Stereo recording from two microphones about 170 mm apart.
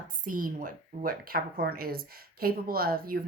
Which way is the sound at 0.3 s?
55° right (ahead or behind).